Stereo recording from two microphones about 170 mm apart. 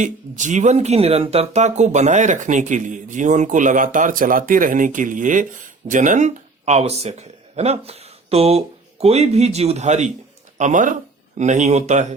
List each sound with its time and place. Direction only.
0.0 s speech: 45° right (ahead or behind)